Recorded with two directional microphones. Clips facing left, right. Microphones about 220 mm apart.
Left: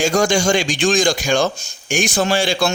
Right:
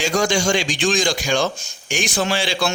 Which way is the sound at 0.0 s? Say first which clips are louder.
Left 3 dB; 45° left (ahead or behind).